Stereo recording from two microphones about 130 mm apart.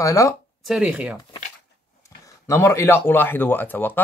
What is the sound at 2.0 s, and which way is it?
Speech, 25° left (ahead or behind).